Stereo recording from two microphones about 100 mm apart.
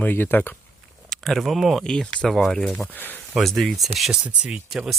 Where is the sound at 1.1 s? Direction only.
Centre (ahead or behind).